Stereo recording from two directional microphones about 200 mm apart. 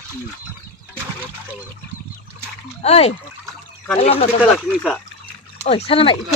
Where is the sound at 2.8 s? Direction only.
30° left (ahead or behind).